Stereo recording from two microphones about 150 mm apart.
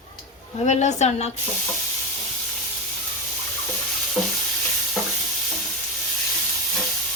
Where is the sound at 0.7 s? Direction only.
50° left (ahead or behind).